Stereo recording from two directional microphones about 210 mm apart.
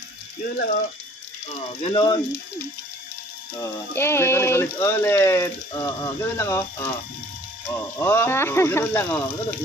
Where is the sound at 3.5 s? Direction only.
15° left (ahead or behind).